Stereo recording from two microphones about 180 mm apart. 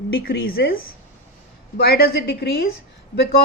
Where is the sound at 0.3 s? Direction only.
60° left (ahead or behind).